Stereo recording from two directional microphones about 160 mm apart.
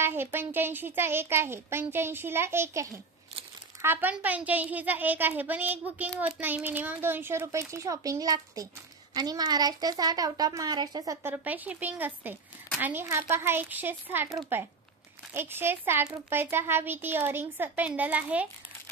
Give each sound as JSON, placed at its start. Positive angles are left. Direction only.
{"t": 0.0, "sound": "speech", "side_deg": -15}
{"t": 11.2, "sound": "speech", "side_deg": -10}